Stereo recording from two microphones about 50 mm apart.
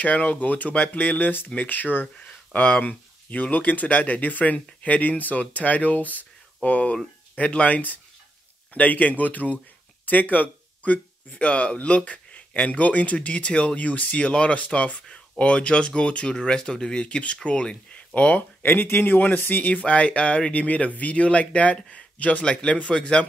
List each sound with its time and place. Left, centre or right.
0.0 s speech: left